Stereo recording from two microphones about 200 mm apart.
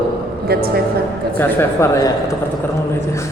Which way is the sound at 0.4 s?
50° right (ahead or behind).